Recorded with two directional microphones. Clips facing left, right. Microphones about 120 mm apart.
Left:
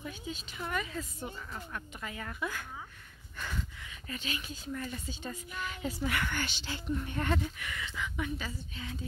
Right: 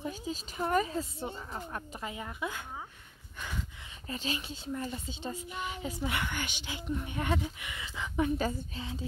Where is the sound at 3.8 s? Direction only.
30° right (ahead or behind).